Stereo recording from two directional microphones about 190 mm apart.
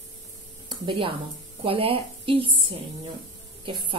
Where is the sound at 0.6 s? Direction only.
25° right (ahead or behind).